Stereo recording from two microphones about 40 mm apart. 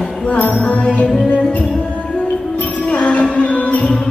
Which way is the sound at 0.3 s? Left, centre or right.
Left.